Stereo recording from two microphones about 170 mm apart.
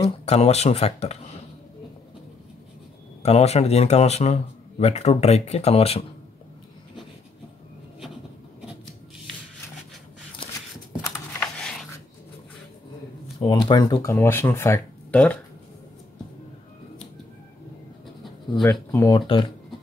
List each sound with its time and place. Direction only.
0.2 s speech: 35° left (ahead or behind)
3.2 s speech: 40° left (ahead or behind)
10.9 s a sound: 15° left (ahead or behind)
13.4 s speech: 30° left (ahead or behind)
14.1 s speech: 15° left (ahead or behind)
18.6 s speech: 15° left (ahead or behind)
19.1 s speech: 30° left (ahead or behind)